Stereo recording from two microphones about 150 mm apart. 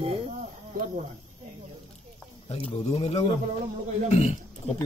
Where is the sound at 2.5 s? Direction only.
40° left (ahead or behind).